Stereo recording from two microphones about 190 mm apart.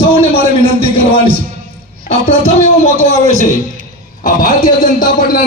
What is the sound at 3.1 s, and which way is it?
A man's voice, 40° left (ahead or behind).